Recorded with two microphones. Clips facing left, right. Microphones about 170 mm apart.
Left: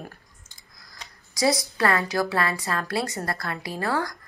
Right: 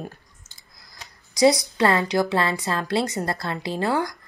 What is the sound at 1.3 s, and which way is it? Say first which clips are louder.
A woman's voice: right 6 dB; 20° right (ahead or behind).